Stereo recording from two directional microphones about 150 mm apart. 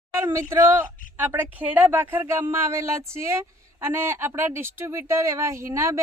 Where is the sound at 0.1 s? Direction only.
15° right (ahead or behind).